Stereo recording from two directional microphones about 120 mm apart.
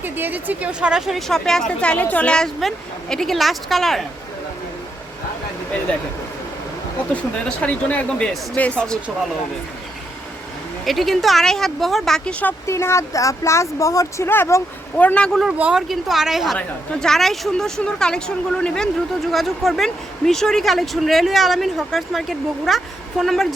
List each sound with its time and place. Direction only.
0.0 s speech: 15° right (ahead or behind); by 4.0 s centre (ahead or behind)
7.1 s speech: 10° left (ahead or behind)
10.8 s speech: centre (ahead or behind)
12.6 s speech: 25° left (ahead or behind); by 15.4 s 5° left (ahead or behind)
15.4 s speech: 10° right (ahead or behind)